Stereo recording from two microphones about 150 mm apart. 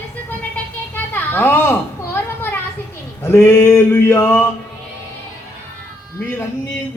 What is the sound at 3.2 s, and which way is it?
Speech, 15° left (ahead or behind).